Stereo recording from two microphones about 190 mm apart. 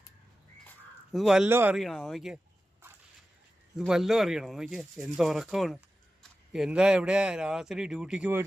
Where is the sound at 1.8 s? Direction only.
Centre (ahead or behind).